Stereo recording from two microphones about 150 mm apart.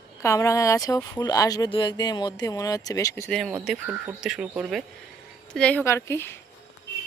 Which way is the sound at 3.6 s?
5° right (ahead or behind).